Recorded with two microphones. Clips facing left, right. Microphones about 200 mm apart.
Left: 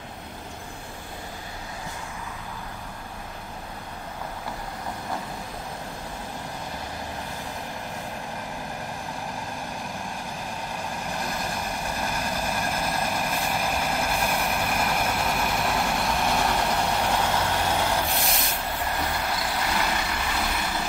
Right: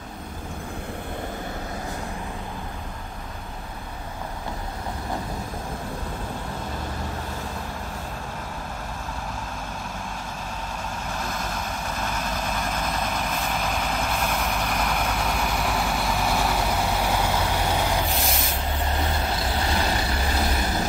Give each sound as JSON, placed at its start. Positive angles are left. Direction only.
{"t": 11.1, "sound": "vehicle", "side_deg": 15}